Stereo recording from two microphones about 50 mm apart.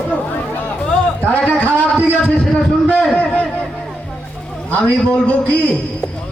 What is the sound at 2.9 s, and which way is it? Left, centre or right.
Speech, left.